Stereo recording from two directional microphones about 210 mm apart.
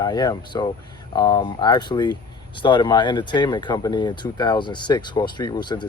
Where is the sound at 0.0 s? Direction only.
20° left (ahead or behind).